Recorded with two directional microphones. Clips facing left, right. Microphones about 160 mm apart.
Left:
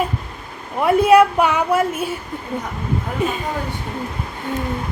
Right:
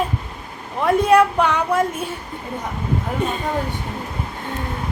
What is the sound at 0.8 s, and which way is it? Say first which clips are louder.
Speech: left 2 dB; 5° left (ahead or behind).